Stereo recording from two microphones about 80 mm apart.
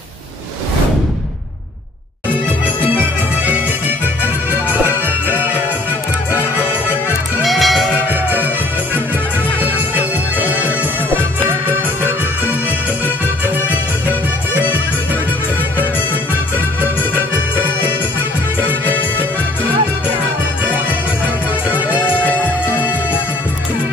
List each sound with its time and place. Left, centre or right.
5.3 s music: right
7.4 s music: centre
8.1 s music: right
22.0 s music: left